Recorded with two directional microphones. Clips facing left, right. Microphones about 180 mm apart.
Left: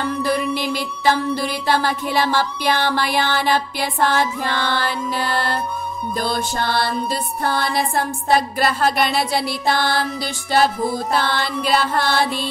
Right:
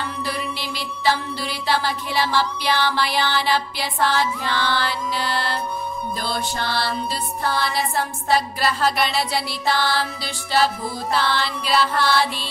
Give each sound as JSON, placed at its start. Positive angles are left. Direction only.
{"t": 0.0, "sound": "music", "side_deg": 45}